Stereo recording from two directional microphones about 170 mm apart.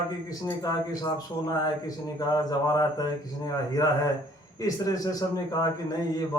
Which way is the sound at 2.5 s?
20° left (ahead or behind).